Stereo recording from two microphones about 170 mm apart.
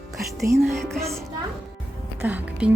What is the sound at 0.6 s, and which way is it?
Music, centre (ahead or behind).